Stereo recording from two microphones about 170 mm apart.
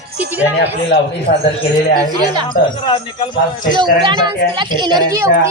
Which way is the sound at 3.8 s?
25° right (ahead or behind).